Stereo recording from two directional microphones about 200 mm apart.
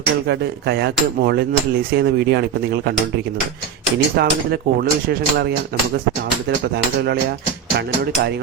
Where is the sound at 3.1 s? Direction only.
50° right (ahead or behind).